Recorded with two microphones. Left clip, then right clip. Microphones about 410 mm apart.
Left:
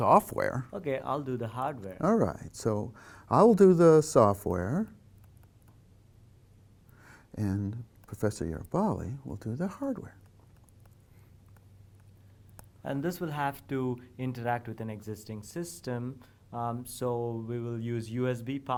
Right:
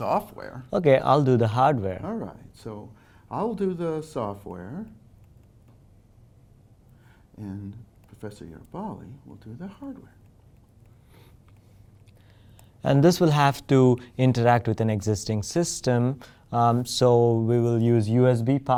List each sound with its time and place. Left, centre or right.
0.0 s speech: left
0.7 s speech: right
2.0 s speech: left
7.3 s speech: left
8.2 s speech: left
12.8 s speech: right